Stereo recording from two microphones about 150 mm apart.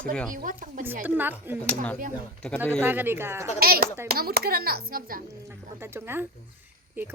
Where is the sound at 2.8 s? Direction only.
15° right (ahead or behind).